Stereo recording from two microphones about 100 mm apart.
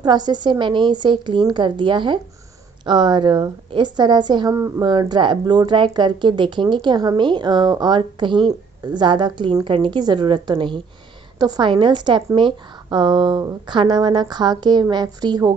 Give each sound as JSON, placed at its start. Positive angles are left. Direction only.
{"t": 0.0, "sound": "speech", "side_deg": -45}
{"t": 4.6, "sound": "a woman's voice", "side_deg": -25}
{"t": 4.8, "sound": "speech", "side_deg": -45}